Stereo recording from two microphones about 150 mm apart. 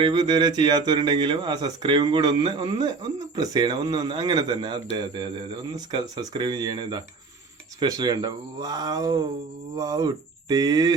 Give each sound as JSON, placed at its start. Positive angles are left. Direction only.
{"t": 0.0, "sound": "speech", "side_deg": -30}